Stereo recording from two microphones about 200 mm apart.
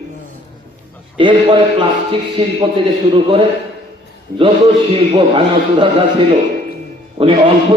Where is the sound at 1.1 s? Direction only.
25° right (ahead or behind).